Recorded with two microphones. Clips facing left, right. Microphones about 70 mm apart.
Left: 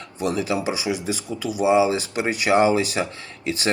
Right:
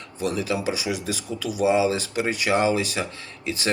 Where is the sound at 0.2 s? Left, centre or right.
Left.